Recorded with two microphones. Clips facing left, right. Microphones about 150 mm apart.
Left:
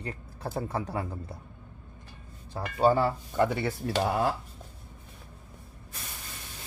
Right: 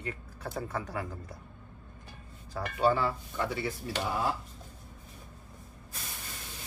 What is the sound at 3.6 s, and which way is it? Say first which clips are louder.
Speech: left 5 dB; 60° left (ahead or behind).